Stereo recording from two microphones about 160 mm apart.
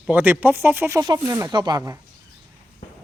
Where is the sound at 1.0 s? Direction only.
25° right (ahead or behind).